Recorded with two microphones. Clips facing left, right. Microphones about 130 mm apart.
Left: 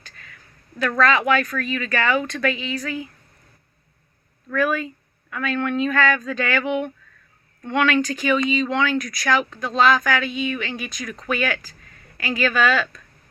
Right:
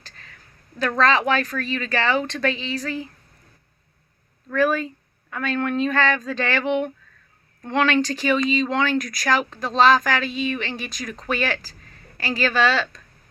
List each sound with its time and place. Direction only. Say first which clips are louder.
0.0 s a sound: left 1 dB; 35° right (ahead or behind)
0.9 s speech: left 1 dB; 30° right (ahead or behind)
4.4 s speech: right 1 dB; 30° right (ahead or behind)